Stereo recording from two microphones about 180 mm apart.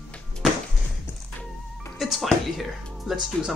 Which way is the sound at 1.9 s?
Centre (ahead or behind).